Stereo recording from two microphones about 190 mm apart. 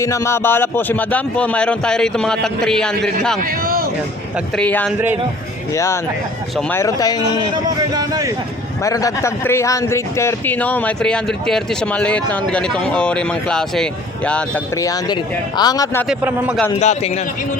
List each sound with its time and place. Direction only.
0.0 s a man's voice: 15° left (ahead or behind)
3.4 s speech: 50° right (ahead or behind)
4.5 s a man's voice: 5° left (ahead or behind)
7.5 s speech: 20° right (ahead or behind)
8.8 s a man's voice: 15° left (ahead or behind)
14.8 s speech: 20° left (ahead or behind)
16.0 s a man's voice: 5° right (ahead or behind)
16.8 s a man's voice: 35° left (ahead or behind)